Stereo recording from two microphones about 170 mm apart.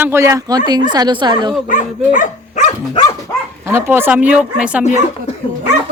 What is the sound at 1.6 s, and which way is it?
Speech, 50° left (ahead or behind).